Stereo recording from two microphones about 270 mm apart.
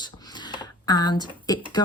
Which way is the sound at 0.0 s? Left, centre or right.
Centre.